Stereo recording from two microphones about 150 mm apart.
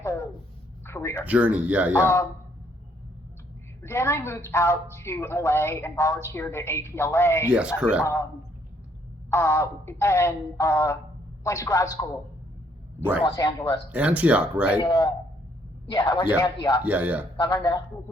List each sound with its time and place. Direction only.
0.0 s a sound: 20° left (ahead or behind)
1.2 s speech: 10° right (ahead or behind)
1.9 s a woman's voice: 15° left (ahead or behind)
3.8 s a woman's voice: 20° left (ahead or behind)
7.5 s speech: 5° right (ahead or behind)
9.3 s speech: 20° left (ahead or behind)
13.2 s speech: 25° left (ahead or behind)
13.9 s speech: 10° right (ahead or behind)
14.8 s speech: 25° left (ahead or behind)
16.8 s speech: 10° right (ahead or behind)
17.3 s speech: 25° left (ahead or behind)